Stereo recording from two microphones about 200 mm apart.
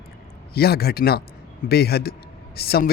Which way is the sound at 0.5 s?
50° left (ahead or behind).